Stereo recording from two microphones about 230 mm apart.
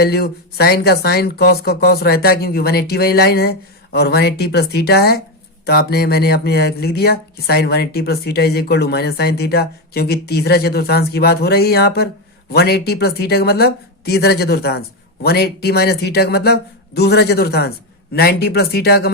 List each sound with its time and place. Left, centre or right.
0.0 s speech: left